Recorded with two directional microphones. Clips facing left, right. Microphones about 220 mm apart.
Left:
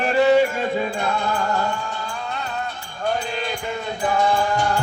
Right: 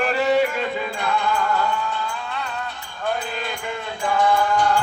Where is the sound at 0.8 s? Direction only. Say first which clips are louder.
Left 1 dB; 40° left (ahead or behind).